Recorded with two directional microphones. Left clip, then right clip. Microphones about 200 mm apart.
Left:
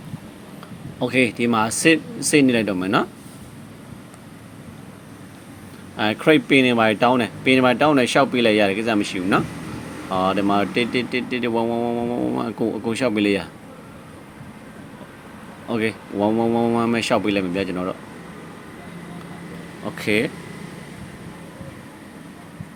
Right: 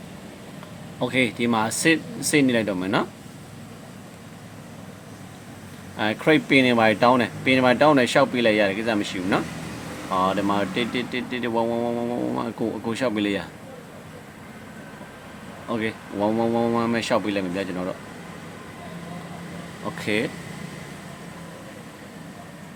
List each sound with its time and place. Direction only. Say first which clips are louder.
0.9 s speech: left 3 dB; 10° left (ahead or behind)
6.0 s speech: left 3 dB; 15° left (ahead or behind)
15.7 s speech: left 4 dB; 15° left (ahead or behind)
19.8 s speech: left 4 dB; 15° left (ahead or behind)